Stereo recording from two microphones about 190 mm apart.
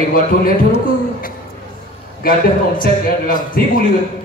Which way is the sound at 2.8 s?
45° left (ahead or behind).